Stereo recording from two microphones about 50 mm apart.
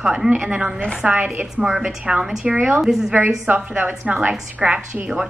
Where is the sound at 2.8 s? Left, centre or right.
Centre.